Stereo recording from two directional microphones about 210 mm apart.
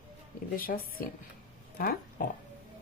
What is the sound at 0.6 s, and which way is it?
Speech, 45° left (ahead or behind).